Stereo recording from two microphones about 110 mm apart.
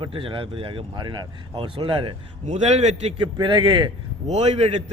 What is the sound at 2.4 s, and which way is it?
Speech, 90° right.